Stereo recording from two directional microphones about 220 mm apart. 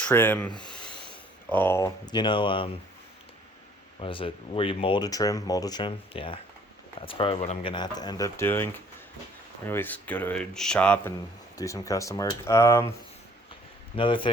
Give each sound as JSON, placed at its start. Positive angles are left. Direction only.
{"t": 0.0, "sound": "speech", "side_deg": 10}
{"t": 0.6, "sound": "snort", "side_deg": 5}
{"t": 1.5, "sound": "speech", "side_deg": 10}
{"t": 4.0, "sound": "speech", "side_deg": 25}
{"t": 13.9, "sound": "speech", "side_deg": 25}